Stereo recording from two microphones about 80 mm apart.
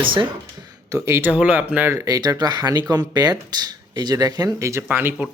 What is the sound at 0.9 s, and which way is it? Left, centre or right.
Speech, right.